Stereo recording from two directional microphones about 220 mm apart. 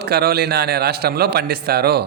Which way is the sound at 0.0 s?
45° right (ahead or behind).